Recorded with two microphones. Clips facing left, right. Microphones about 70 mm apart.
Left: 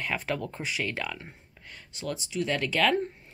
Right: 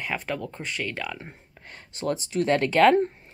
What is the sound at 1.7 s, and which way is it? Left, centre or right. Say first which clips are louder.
Speech: right 7 dB; right.